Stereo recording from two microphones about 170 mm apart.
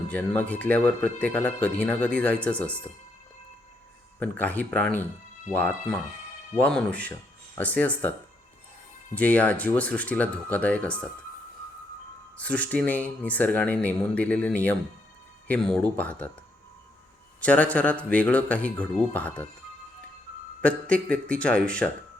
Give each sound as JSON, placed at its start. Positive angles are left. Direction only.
{"t": 0.1, "sound": "speech", "side_deg": 10}
{"t": 4.2, "sound": "speech", "side_deg": 10}
{"t": 9.1, "sound": "speech", "side_deg": 10}
{"t": 12.4, "sound": "speech", "side_deg": 10}
{"t": 17.4, "sound": "speech", "side_deg": 10}
{"t": 20.6, "sound": "speech", "side_deg": 10}